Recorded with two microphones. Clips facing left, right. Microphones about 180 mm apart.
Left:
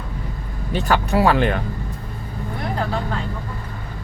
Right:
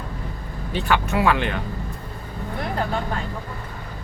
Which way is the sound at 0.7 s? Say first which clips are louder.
Left 3 dB; 40° left (ahead or behind).